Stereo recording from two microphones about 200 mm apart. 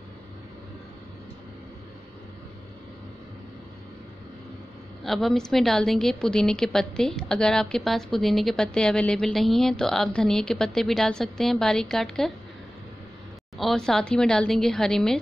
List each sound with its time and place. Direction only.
5.0 s a woman's voice: centre (ahead or behind)
13.6 s a woman's voice: centre (ahead or behind)